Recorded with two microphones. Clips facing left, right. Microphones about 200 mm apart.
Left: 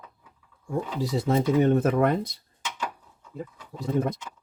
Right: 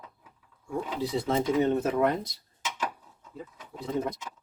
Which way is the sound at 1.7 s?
55° left (ahead or behind).